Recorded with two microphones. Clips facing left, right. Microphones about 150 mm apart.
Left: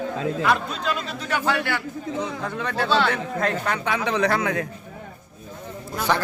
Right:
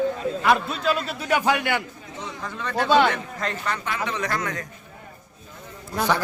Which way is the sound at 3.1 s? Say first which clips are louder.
Left 5 dB; 60° left (ahead or behind).